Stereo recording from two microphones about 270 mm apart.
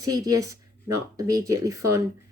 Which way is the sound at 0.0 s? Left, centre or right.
Centre.